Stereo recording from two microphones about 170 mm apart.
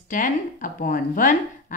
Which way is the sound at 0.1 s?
50° left (ahead or behind).